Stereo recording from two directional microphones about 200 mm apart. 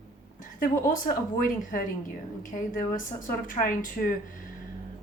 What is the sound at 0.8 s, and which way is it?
A woman's voice, 40° left (ahead or behind).